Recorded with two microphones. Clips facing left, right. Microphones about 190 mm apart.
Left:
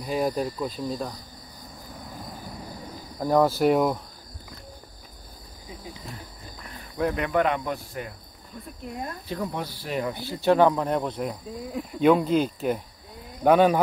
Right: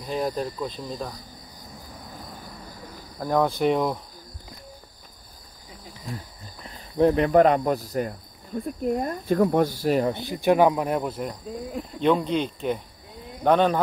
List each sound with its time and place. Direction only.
0.0 s cricket: 10° left (ahead or behind)
3.2 s cricket: 5° left (ahead or behind)
6.6 s speech: 30° right (ahead or behind)
10.1 s speech: 15° right (ahead or behind); by 11.3 s centre (ahead or behind)
12.0 s cricket: 5° left (ahead or behind)